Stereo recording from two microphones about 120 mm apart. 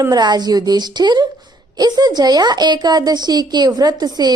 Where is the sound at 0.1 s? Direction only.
35° right (ahead or behind).